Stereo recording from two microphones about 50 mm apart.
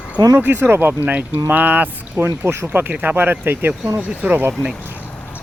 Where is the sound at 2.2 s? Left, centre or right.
Right.